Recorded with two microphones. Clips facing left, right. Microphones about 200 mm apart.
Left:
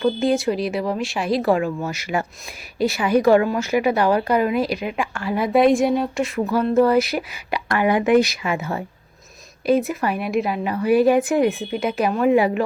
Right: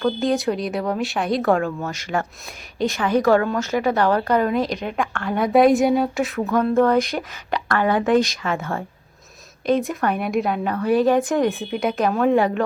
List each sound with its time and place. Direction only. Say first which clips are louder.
0.0 s speech: left 1 dB; 5° left (ahead or behind)